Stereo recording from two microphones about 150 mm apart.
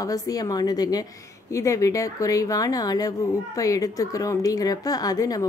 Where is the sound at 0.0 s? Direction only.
25° left (ahead or behind).